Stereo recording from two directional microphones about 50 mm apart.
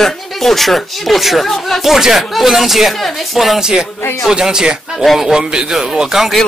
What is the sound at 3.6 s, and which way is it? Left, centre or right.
Speech, centre.